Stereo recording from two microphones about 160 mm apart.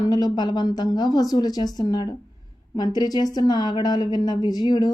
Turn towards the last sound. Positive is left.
turn(degrees=25)  # may be behind; listen again after turning